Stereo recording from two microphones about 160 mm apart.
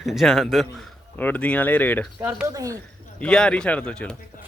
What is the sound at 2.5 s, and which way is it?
Speech, 20° right (ahead or behind).